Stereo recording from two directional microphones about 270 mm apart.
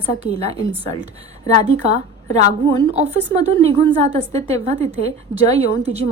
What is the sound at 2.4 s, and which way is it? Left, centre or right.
A woman's voice, right.